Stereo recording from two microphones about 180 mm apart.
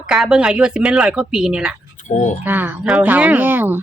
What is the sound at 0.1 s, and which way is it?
Speech, 5° right (ahead or behind).